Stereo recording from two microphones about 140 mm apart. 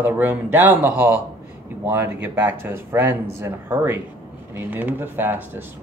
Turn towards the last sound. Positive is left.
turn(degrees=-15)  # may be behind; listen again after turning